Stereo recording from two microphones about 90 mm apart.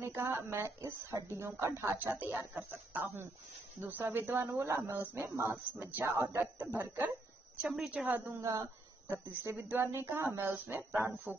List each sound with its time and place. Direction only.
0.0 s a woman's voice: 25° right (ahead or behind)
8.4 s speech: 35° right (ahead or behind)